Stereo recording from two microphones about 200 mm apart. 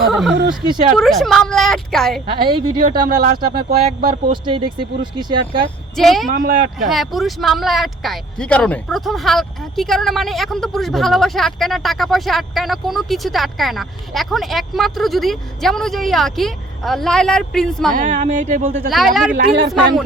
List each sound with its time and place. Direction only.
0.0 s speech: centre (ahead or behind)
2.3 s speech: 25° right (ahead or behind)
3.2 s speech: 45° right (ahead or behind)
4.3 s speech: 25° right (ahead or behind)
6.0 s speech: centre (ahead or behind)
6.3 s speech: 45° right (ahead or behind)
6.8 s speech: centre (ahead or behind)
17.9 s speech: 40° right (ahead or behind)
18.9 s speech: centre (ahead or behind)